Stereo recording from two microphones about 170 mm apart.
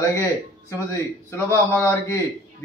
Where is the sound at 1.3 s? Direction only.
15° left (ahead or behind).